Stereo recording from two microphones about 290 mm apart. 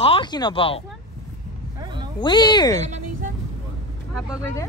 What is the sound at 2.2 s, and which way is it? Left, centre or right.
Speech, centre.